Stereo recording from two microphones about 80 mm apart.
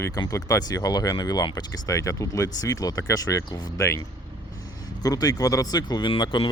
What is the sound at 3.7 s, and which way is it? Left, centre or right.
Speech, left.